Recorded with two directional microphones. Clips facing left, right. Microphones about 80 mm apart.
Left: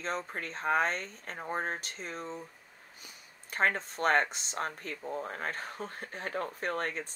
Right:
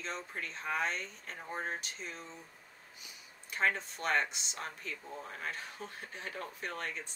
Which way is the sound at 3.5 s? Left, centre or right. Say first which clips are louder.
Left 3 dB; left.